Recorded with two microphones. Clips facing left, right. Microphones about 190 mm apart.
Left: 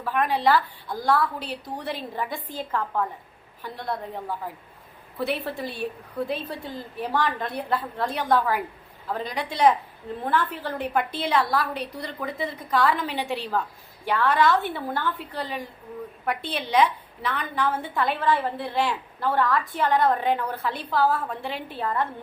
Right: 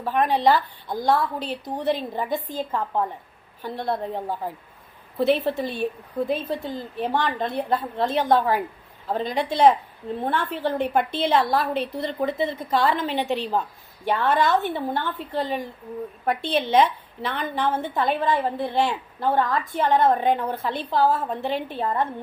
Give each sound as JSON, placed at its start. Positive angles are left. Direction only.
{"t": 0.0, "sound": "a woman's voice", "side_deg": -25}